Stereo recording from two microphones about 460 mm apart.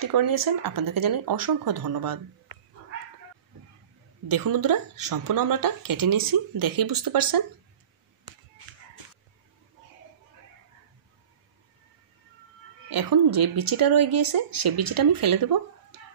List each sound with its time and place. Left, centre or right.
0.0 s speech: right
4.3 s speech: right
12.9 s speech: right